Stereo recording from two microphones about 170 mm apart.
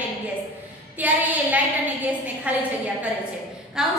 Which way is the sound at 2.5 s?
10° right (ahead or behind).